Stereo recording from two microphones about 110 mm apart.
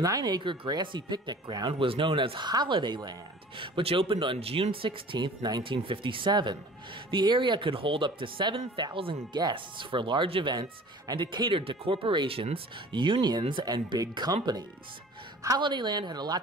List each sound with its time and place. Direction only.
0.0 s speech: 35° right (ahead or behind)
1.7 s speech: 55° right (ahead or behind)
10.5 s speech: 40° right (ahead or behind)
15.6 s speech: 40° right (ahead or behind)